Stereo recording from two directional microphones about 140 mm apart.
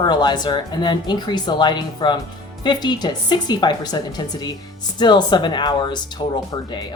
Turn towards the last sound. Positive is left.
turn(degrees=30)  # may be behind; listen again after turning